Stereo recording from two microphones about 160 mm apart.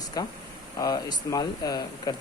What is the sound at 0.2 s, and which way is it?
Speech, 25° left (ahead or behind).